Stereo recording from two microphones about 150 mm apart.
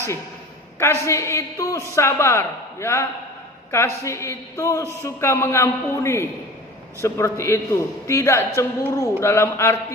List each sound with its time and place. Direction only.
0.8 s a man's voice: 20° left (ahead or behind)